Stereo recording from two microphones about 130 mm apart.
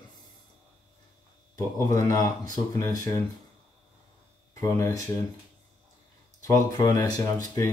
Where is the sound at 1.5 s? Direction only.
30° left (ahead or behind).